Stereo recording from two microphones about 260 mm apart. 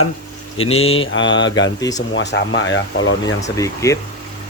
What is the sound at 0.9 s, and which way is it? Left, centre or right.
Speech, left.